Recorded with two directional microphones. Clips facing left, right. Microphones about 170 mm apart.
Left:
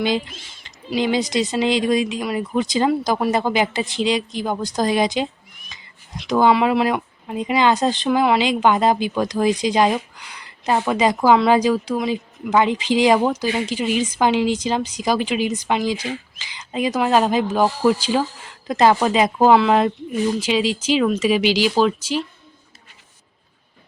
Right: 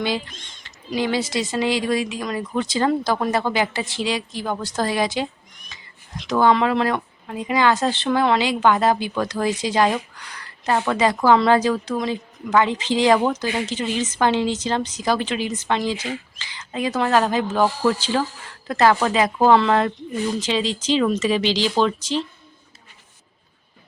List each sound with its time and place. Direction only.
0.3 s speech: 5° left (ahead or behind)
0.9 s speech: 20° left (ahead or behind)